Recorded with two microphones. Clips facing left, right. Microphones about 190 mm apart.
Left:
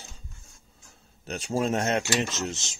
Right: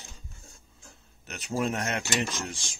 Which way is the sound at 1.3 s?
30° left (ahead or behind).